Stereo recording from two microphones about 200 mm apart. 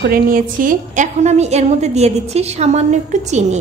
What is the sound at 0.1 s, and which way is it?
A woman's voice, 45° right (ahead or behind).